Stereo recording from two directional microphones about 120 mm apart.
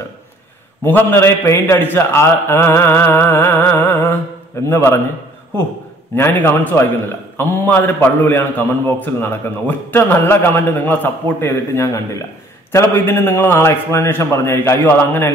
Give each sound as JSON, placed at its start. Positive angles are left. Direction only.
{"t": 0.8, "sound": "a man's voice", "side_deg": 20}
{"t": 6.1, "sound": "a man's voice", "side_deg": 20}